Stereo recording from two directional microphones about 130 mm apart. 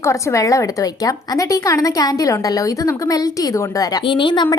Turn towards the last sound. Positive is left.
turn(degrees=35)  # may be behind; listen again after turning